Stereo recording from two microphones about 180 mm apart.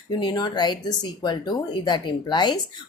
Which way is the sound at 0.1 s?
25° left (ahead or behind).